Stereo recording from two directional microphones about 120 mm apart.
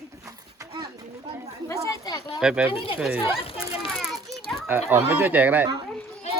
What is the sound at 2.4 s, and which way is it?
Speech, 5° right (ahead or behind).